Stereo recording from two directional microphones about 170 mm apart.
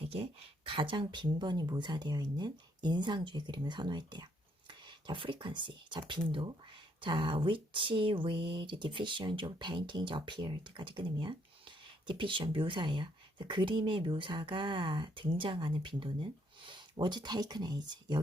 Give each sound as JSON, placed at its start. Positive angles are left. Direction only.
{"t": 0.0, "sound": "speech", "side_deg": -35}